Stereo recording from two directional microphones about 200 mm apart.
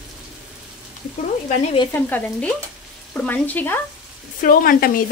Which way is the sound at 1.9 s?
10° left (ahead or behind).